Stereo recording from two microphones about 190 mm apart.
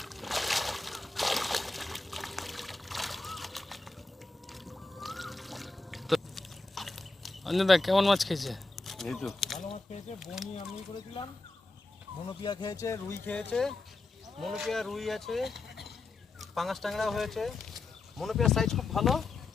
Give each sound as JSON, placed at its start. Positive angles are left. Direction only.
{"t": 0.0, "sound": "a sound", "side_deg": 0}
{"t": 4.5, "sound": "boat", "side_deg": 0}
{"t": 9.6, "sound": "speech", "side_deg": 35}
{"t": 10.2, "sound": "speech", "side_deg": 0}
{"t": 10.9, "sound": "speech", "side_deg": 25}
{"t": 12.4, "sound": "speech", "side_deg": 25}